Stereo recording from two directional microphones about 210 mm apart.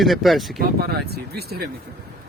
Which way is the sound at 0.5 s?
50° right (ahead or behind).